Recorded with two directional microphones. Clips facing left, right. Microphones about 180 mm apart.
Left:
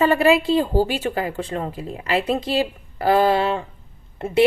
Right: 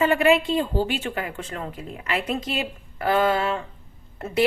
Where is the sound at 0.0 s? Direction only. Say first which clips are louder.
Left 2 dB; 35° left (ahead or behind).